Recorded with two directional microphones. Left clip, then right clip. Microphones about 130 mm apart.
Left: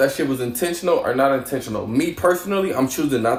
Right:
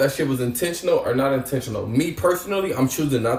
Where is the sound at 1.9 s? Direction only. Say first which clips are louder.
Left 2 dB; 20° left (ahead or behind).